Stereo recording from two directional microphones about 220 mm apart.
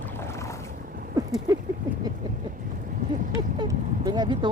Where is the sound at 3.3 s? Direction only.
15° right (ahead or behind).